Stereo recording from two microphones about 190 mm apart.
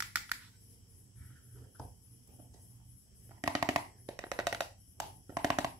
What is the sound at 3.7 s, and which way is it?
Music, 20° right (ahead or behind).